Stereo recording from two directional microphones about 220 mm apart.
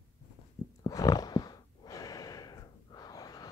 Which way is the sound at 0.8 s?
15° left (ahead or behind).